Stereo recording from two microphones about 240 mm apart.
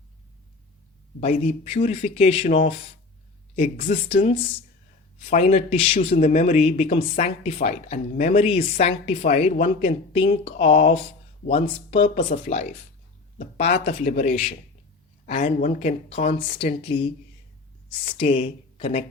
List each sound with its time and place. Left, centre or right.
1.2 s speech: left